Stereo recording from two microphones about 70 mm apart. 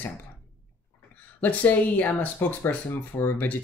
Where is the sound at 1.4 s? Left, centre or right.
Left.